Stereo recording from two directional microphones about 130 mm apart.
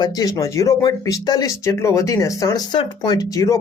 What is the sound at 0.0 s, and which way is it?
Speech, 30° left (ahead or behind).